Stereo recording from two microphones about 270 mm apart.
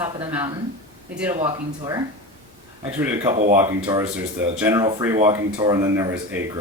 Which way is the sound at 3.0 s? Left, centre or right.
Centre.